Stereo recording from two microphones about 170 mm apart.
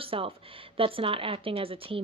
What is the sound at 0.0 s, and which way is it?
A woman's voice, 35° right (ahead or behind).